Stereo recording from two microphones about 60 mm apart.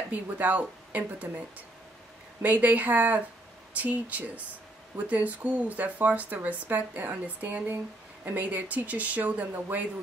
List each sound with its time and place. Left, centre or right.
0.1 s speech: right
2.4 s speech: right